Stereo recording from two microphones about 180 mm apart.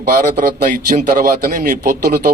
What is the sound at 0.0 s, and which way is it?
A man's voice, 55° right (ahead or behind).